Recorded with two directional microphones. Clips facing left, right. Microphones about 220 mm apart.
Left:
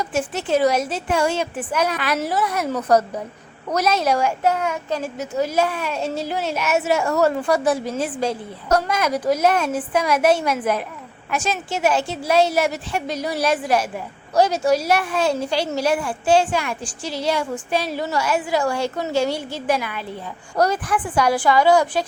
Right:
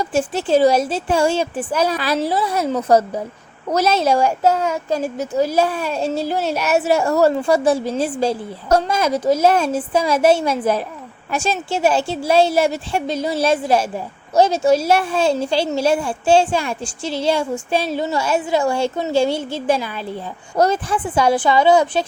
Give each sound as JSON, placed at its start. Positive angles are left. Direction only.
{"t": 0.0, "sound": "a woman's voice", "side_deg": -30}